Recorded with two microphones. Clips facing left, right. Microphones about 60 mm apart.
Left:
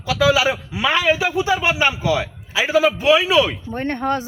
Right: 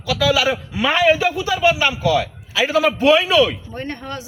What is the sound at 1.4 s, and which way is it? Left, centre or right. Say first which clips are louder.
A man's voice: right 1 dB; left.